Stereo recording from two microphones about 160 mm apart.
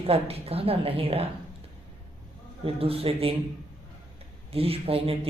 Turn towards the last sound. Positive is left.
turn(degrees=-35)  # may be behind; listen again after turning